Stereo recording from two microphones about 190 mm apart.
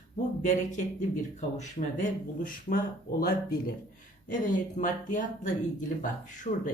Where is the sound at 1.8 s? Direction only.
40° left (ahead or behind).